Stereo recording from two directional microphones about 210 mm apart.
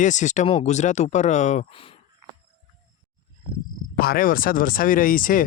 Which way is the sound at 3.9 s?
45° left (ahead or behind).